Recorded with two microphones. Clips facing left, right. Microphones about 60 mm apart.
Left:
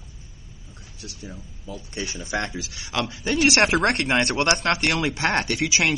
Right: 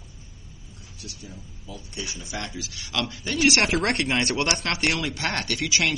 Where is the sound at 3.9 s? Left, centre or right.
Left.